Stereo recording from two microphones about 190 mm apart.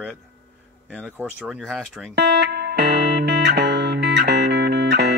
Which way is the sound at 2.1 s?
60° right (ahead or behind).